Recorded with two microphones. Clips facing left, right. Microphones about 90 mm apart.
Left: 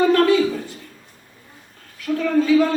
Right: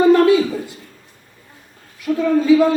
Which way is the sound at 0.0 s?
15° right (ahead or behind).